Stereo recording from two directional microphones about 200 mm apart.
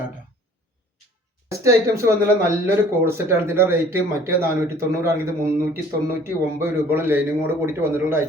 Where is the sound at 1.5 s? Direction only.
15° right (ahead or behind).